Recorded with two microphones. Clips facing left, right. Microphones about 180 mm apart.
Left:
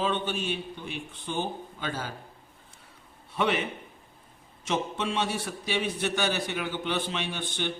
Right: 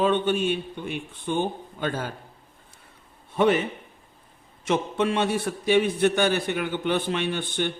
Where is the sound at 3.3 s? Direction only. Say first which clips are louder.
Right 7 dB; 45° right (ahead or behind).